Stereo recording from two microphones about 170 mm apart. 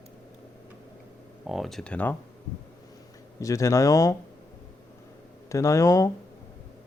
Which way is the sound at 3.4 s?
20° left (ahead or behind).